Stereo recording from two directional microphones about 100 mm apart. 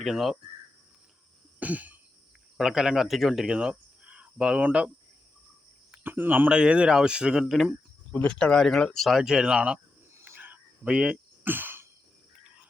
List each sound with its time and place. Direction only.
0.0 s speech: centre (ahead or behind)
1.5 s cough: 15° right (ahead or behind)
2.6 s speech: 5° right (ahead or behind)
5.9 s speech: 20° right (ahead or behind); by 7.8 s centre (ahead or behind)
8.1 s speech: 10° left (ahead or behind); by 9.8 s 10° right (ahead or behind)
10.2 s a sound: 20° right (ahead or behind)